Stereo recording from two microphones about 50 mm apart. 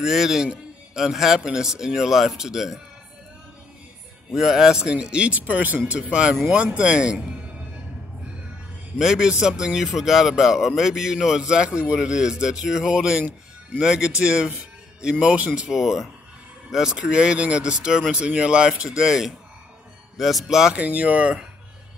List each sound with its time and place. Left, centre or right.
0.0 s a man's voice: centre
4.3 s speech: centre; by 5.8 s right
5.9 s speech: right
8.9 s a man's voice: centre
15.6 s a man's voice: centre
17.0 s a man's voice: right
20.7 s speech: right